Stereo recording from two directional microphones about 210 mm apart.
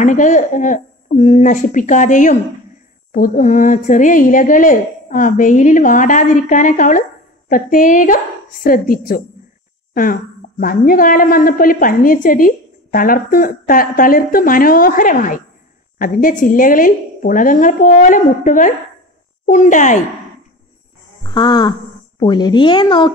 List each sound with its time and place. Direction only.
0.0 s a woman's voice: 35° left (ahead or behind)
10.6 s a woman's voice: 40° left (ahead or behind)
21.2 s speech: 20° left (ahead or behind)